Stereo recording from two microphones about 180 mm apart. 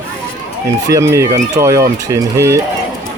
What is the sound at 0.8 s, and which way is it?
Speech, 15° right (ahead or behind).